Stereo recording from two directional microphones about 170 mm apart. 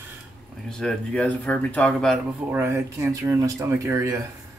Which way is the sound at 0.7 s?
5° left (ahead or behind).